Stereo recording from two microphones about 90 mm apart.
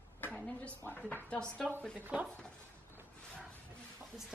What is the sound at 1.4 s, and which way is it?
Speech, 10° left (ahead or behind).